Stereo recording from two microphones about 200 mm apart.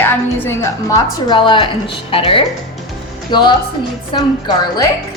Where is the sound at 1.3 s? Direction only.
25° left (ahead or behind).